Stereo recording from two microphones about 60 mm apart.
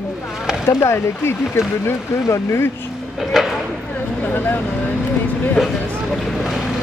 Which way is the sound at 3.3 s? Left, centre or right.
Centre.